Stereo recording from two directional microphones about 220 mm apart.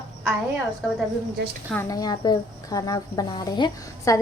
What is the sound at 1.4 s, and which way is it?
Speech, 50° right (ahead or behind).